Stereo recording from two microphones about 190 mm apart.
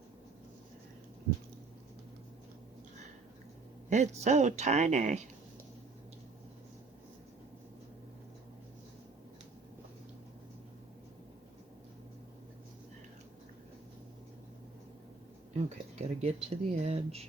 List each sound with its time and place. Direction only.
3.8 s speech: 40° right (ahead or behind)
15.5 s speech: 35° right (ahead or behind)